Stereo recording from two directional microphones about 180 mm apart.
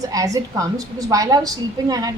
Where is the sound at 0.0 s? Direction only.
20° right (ahead or behind).